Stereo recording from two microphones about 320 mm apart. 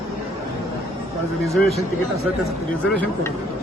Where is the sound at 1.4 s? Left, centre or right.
Centre.